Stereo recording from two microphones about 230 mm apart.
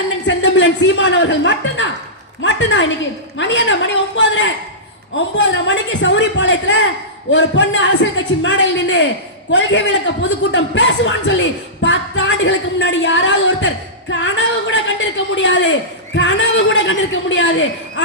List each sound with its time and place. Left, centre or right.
0.3 s a man's voice: left